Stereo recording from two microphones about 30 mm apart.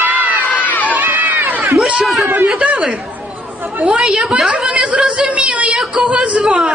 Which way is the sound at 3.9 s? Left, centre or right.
Centre.